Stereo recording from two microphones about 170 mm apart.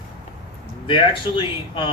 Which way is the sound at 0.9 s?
30° left (ahead or behind).